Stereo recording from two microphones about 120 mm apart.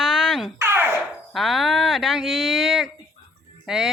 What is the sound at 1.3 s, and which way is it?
Speech, centre (ahead or behind).